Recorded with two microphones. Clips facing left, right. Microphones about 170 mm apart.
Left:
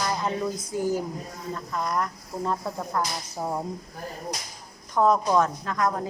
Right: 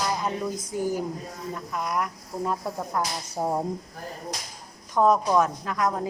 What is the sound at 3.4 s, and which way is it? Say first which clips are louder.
Speech: right 4 dB; 30° right (ahead or behind).